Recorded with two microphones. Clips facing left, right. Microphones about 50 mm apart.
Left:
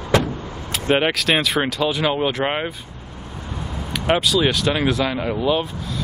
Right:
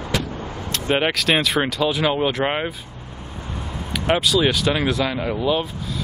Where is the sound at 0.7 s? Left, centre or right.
Centre.